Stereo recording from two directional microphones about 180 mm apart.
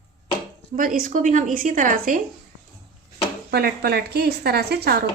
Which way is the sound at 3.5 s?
60° right (ahead or behind).